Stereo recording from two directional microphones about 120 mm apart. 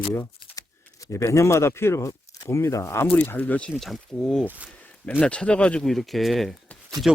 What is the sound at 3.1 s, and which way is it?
Speech, 15° left (ahead or behind).